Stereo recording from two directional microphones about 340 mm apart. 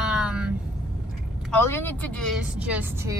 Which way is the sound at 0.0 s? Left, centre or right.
Centre.